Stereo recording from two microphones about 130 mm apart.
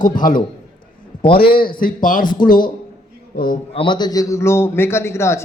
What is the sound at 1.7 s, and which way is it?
Speech, 90° left.